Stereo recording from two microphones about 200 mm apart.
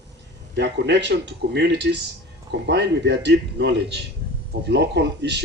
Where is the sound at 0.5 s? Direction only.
60° right (ahead or behind).